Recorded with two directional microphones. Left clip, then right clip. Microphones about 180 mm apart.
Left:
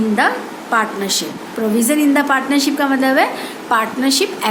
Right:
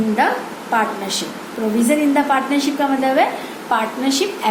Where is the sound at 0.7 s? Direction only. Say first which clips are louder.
Left 2 dB; 55° left (ahead or behind).